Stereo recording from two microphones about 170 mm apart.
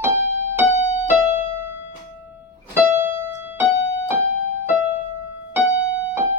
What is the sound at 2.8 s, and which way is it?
Keyboard, 15° right (ahead or behind).